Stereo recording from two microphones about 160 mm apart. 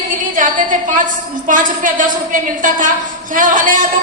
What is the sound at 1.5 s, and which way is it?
Speech, 55° right (ahead or behind).